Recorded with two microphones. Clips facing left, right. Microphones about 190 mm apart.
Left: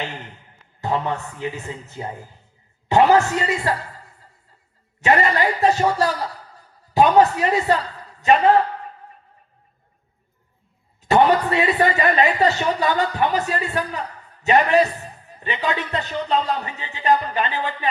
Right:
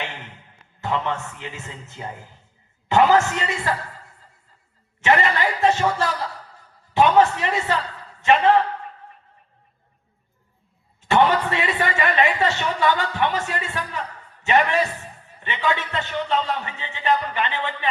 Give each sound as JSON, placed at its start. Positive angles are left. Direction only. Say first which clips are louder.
{"t": 1.0, "sound": "a man's voice", "louder": "left 3 dB", "side_deg": 35}
{"t": 4.9, "sound": "a man's voice", "louder": "left 2 dB", "side_deg": 35}
{"t": 11.0, "sound": "a man's voice", "louder": "left 2 dB", "side_deg": 40}